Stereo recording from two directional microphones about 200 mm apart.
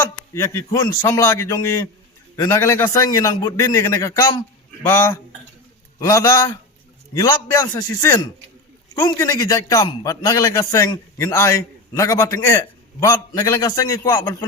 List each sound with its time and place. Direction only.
0.3 s a man's voice: 15° left (ahead or behind)
6.0 s a man's voice: 15° left (ahead or behind)